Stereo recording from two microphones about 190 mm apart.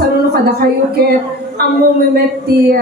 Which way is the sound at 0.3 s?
55° right (ahead or behind).